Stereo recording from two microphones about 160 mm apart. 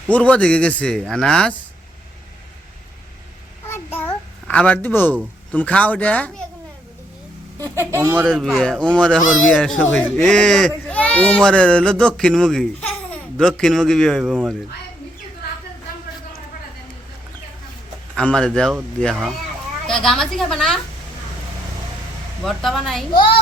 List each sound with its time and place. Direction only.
0.1 s a man's voice: 10° left (ahead or behind)
3.7 s a sound: 15° left (ahead or behind)
5.5 s a man's voice: 10° left (ahead or behind)
7.6 s a woman's voice: 15° right (ahead or behind)
8.3 s speech: centre (ahead or behind)
18.2 s speech: 5° left (ahead or behind)
22.4 s speech: centre (ahead or behind)